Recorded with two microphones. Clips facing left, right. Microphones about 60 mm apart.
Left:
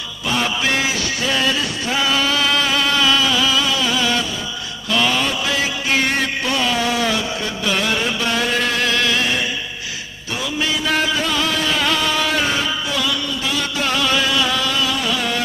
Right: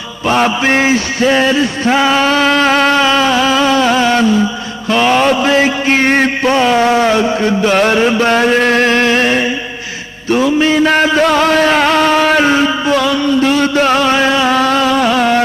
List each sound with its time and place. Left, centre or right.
0.3 s mantra: right
10.2 s music: right
11.2 s a sound: right